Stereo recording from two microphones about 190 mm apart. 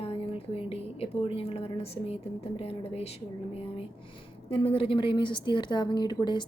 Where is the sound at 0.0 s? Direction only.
30° left (ahead or behind).